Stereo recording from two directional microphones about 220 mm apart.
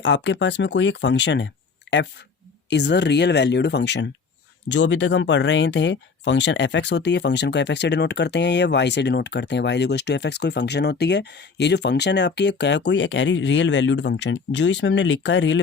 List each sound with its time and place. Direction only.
0.0 s speech: 55° left (ahead or behind)
2.6 s speech: 50° left (ahead or behind)